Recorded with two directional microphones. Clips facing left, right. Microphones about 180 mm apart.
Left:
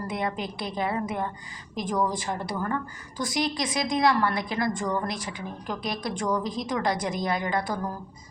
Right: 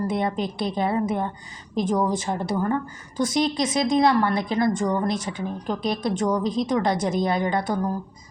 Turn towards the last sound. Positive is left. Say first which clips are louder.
# right 5 dB
turn(degrees=-25)  # may be behind; listen again after turning